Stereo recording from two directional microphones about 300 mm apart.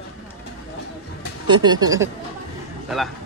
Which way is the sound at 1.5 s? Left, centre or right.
Centre.